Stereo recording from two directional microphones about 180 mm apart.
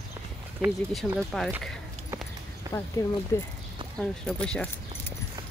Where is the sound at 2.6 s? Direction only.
15° right (ahead or behind).